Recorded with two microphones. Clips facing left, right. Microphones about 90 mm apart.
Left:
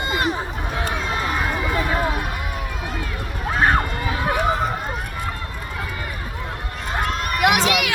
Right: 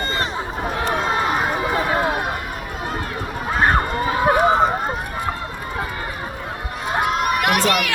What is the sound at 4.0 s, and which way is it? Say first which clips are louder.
Run: right 6 dB; 35° right (ahead or behind).